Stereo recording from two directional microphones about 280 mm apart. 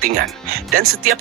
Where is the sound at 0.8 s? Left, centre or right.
Right.